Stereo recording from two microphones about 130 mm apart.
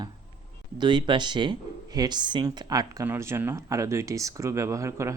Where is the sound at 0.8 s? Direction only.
35° right (ahead or behind).